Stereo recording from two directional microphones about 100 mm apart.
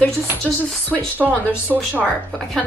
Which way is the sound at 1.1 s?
15° right (ahead or behind).